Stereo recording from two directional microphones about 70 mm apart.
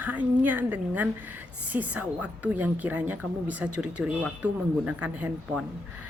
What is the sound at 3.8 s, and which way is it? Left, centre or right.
A woman's voice, centre.